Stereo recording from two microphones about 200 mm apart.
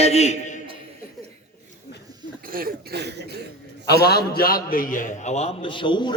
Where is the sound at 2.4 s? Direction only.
45° right (ahead or behind).